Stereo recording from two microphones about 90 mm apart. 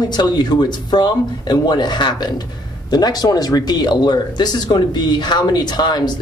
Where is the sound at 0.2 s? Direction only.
55° left (ahead or behind).